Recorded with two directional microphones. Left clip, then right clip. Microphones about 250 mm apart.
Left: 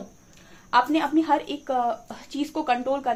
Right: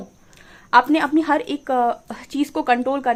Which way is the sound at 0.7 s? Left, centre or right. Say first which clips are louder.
Right 6 dB; right.